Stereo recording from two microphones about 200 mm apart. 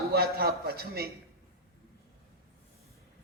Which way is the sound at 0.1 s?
50° right (ahead or behind).